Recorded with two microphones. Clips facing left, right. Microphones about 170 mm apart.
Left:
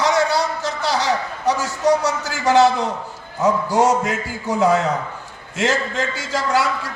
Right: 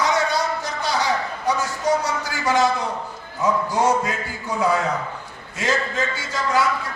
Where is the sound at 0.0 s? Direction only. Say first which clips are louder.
Left 3 dB; 75° left (ahead or behind).